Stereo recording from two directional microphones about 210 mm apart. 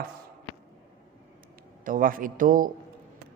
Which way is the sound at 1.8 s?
40° right (ahead or behind).